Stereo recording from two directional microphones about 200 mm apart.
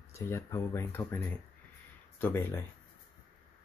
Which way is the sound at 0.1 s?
15° left (ahead or behind).